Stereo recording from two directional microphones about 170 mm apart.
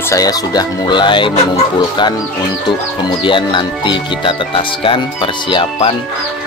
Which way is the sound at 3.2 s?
30° left (ahead or behind).